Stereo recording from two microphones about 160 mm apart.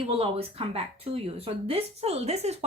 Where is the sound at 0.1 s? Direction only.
35° right (ahead or behind).